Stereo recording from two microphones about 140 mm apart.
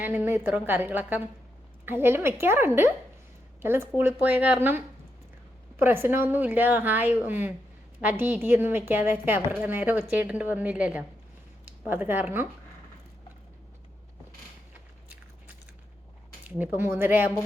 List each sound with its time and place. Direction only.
0.0 s a woman's voice: 15° right (ahead or behind)
16.6 s a woman's voice: 15° right (ahead or behind)